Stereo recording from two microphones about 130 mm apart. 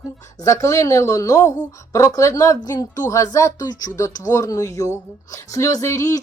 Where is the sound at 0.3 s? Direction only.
25° left (ahead or behind).